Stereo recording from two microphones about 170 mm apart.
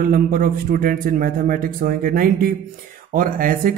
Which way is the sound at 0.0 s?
55° right (ahead or behind).